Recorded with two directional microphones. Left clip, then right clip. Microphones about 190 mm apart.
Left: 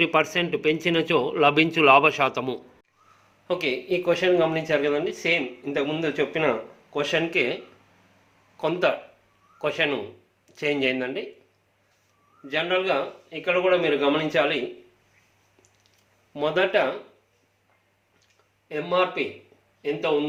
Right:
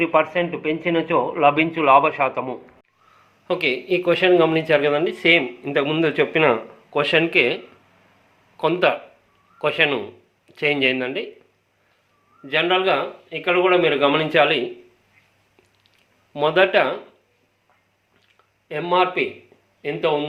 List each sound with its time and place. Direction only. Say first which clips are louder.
0.0 s speech: right 3 dB; 35° left (ahead or behind)
3.4 s speech: right 4 dB; centre (ahead or behind)
12.5 s speech: right 5 dB; 20° right (ahead or behind)
16.3 s speech: right 6 dB; 10° right (ahead or behind)
18.7 s speech: right 4 dB; 25° right (ahead or behind)